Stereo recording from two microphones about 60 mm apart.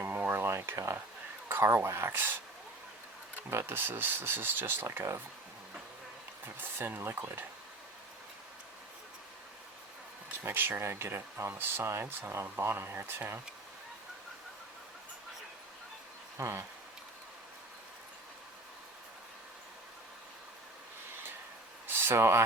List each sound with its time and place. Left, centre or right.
0.0 s a sound: right
1.5 s speech: right
3.5 s speech: right
6.6 s speech: right
10.4 s speech: right
16.4 s speech: right
21.8 s a sound: right